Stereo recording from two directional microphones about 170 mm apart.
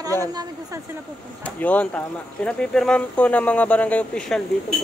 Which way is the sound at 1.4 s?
10° left (ahead or behind).